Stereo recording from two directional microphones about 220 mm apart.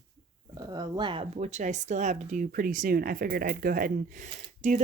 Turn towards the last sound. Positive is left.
turn(degrees=-35)  # may be behind; listen again after turning